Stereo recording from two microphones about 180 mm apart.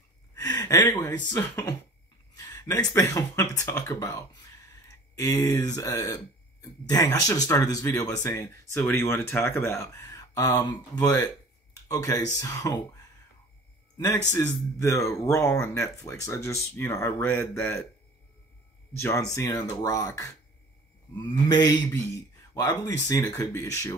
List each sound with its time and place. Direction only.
0.3 s gasp: 20° left (ahead or behind)
1.3 s speech: 15° left (ahead or behind)
4.8 s a sound: 20° left (ahead or behind)
5.8 s speech: 20° left (ahead or behind)
13.9 s a man's voice: 15° left (ahead or behind)
18.9 s speech: 15° left (ahead or behind)
21.5 s speech: 20° left (ahead or behind)